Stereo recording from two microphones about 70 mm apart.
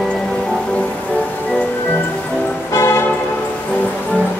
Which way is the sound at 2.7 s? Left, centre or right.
Left.